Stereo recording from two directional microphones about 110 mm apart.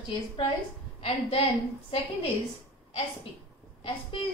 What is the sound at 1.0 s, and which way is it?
Speech, 65° left (ahead or behind).